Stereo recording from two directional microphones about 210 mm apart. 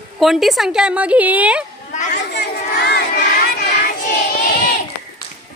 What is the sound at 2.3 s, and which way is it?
Crowd, 50° left (ahead or behind).